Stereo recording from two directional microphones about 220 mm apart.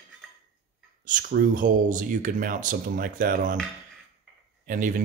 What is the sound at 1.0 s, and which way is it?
Speech, 40° right (ahead or behind).